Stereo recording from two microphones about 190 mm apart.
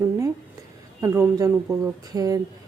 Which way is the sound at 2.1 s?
20° right (ahead or behind).